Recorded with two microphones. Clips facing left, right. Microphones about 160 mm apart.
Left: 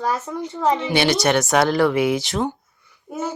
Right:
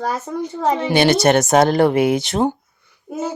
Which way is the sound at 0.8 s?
45° right (ahead or behind).